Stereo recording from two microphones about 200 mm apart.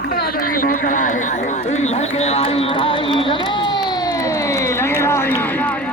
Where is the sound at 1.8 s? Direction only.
30° left (ahead or behind).